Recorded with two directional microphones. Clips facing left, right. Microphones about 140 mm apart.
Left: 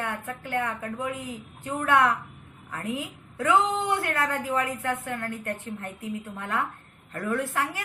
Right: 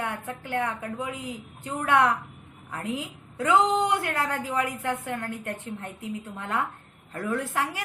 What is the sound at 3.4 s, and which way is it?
A woman's voice, 20° right (ahead or behind).